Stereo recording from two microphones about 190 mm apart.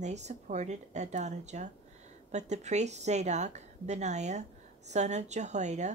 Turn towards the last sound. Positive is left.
turn(degrees=-40)  # may be behind; listen again after turning